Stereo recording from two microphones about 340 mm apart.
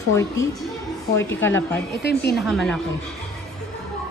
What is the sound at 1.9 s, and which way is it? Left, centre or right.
Speech, left.